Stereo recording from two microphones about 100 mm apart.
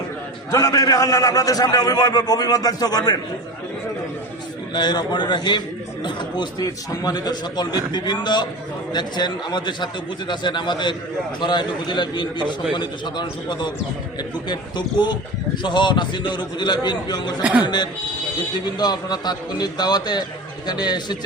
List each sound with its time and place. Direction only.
0.5 s a man's voice: 35° left (ahead or behind)
4.7 s a man's voice: 45° left (ahead or behind)
17.4 s speech: 10° right (ahead or behind)
18.5 s a man's voice: 45° left (ahead or behind)